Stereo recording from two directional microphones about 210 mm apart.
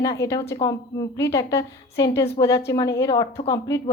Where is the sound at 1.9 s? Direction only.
15° left (ahead or behind).